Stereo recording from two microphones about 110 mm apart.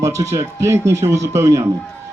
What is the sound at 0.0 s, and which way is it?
Speech, 25° right (ahead or behind).